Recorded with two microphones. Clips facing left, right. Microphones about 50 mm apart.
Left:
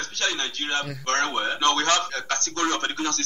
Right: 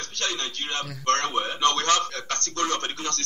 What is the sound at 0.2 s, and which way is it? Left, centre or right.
Speech, left.